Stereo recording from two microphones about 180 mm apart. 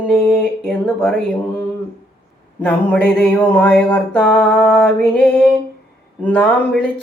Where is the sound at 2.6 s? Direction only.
5° left (ahead or behind).